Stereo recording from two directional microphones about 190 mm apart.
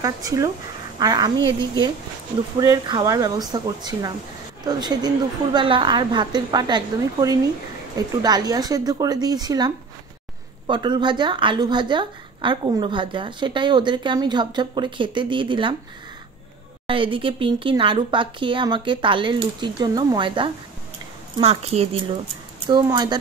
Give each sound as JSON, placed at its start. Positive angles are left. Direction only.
{"t": 0.0, "sound": "a woman's voice", "side_deg": -15}
{"t": 2.6, "sound": "a woman's voice", "side_deg": -15}
{"t": 10.7, "sound": "a woman's voice", "side_deg": -25}
{"t": 16.8, "sound": "a woman's voice", "side_deg": -25}
{"t": 22.7, "sound": "a woman's voice", "side_deg": -20}